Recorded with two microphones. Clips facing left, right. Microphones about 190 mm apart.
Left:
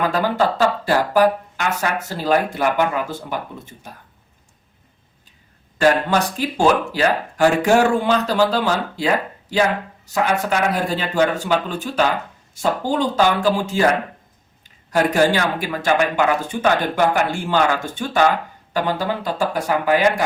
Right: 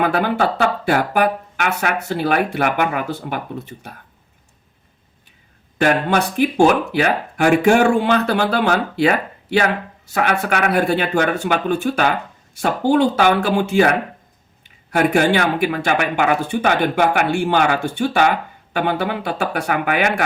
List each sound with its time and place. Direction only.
0.0 s speech: 60° right (ahead or behind)
5.8 s speech: 60° right (ahead or behind)